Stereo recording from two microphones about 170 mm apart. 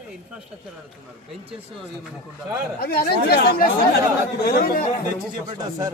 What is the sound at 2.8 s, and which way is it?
Speech, 65° left (ahead or behind).